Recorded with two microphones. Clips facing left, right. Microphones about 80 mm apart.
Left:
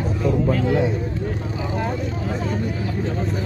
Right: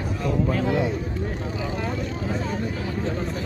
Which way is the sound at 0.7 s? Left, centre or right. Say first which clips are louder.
Left 3 dB; left.